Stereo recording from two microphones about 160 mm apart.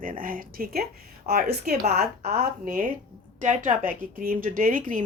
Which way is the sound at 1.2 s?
80° right.